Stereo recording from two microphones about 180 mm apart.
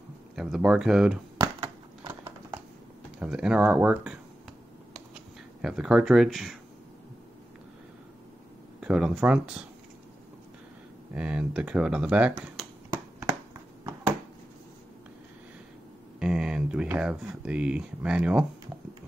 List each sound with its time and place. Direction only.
0.4 s speech: 5° right (ahead or behind)
1.4 s a sound: 20° right (ahead or behind)
3.2 s speech: 5° right (ahead or behind)
5.6 s speech: 5° right (ahead or behind)
8.8 s speech: 5° right (ahead or behind)
11.1 s speech: 5° right (ahead or behind)
16.2 s a sound: 5° right (ahead or behind)